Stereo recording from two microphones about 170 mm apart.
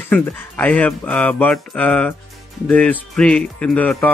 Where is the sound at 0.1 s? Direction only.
10° left (ahead or behind).